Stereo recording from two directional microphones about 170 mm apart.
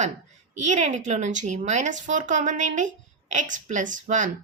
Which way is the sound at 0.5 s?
45° right (ahead or behind).